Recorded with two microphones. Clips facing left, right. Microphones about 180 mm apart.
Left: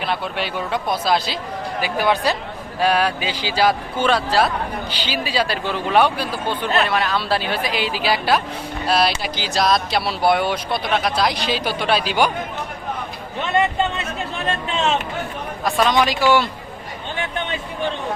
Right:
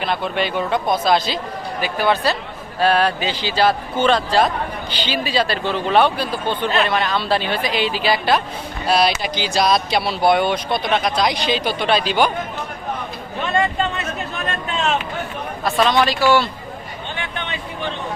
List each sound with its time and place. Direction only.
0.0 s a man's voice: 5° left (ahead or behind)
13.5 s a sound: 20° left (ahead or behind)
15.6 s a man's voice: 15° left (ahead or behind)